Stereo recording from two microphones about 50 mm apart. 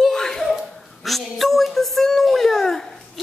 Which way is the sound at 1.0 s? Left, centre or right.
Centre.